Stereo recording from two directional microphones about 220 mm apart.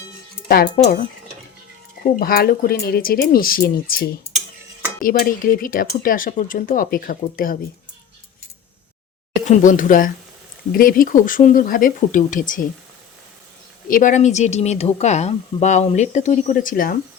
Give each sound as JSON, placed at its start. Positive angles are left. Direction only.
{"t": 0.4, "sound": "speech", "side_deg": 45}
{"t": 2.0, "sound": "speech", "side_deg": 40}
{"t": 9.5, "sound": "speech", "side_deg": 35}
{"t": 13.9, "sound": "speech", "side_deg": 35}